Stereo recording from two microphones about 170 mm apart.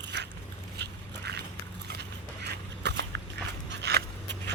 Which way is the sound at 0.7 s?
80° right.